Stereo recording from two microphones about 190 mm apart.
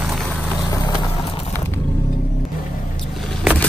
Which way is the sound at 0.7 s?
20° left (ahead or behind).